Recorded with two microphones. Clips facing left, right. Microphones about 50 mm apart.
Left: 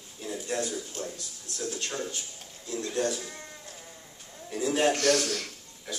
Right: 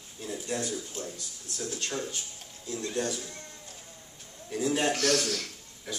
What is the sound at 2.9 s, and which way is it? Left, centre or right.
Speech, centre.